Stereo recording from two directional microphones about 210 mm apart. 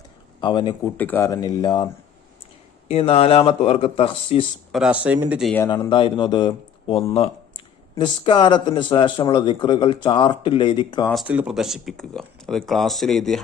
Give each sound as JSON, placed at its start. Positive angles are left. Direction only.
{"t": 0.4, "sound": "a man's voice", "side_deg": 20}
{"t": 0.9, "sound": "speech", "side_deg": 10}
{"t": 2.9, "sound": "a man's voice", "side_deg": 30}
{"t": 4.7, "sound": "speech", "side_deg": -5}
{"t": 5.5, "sound": "a man's voice", "side_deg": 15}
{"t": 7.9, "sound": "a man's voice", "side_deg": 20}
{"t": 11.1, "sound": "speech", "side_deg": -5}